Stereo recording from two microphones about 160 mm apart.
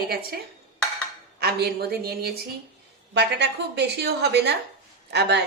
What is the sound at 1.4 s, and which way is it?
Speech, 85° right.